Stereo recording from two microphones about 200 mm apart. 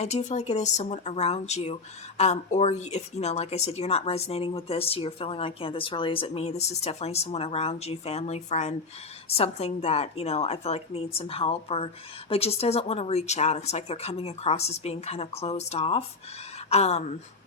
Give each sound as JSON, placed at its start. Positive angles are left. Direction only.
{"t": 0.0, "sound": "speech", "side_deg": 35}